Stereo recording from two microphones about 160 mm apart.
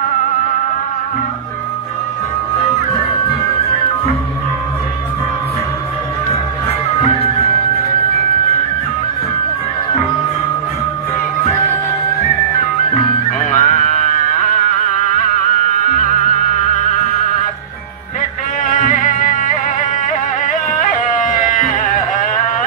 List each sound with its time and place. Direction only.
12.9 s music: 50° left (ahead or behind)
18.6 s music: 55° left (ahead or behind)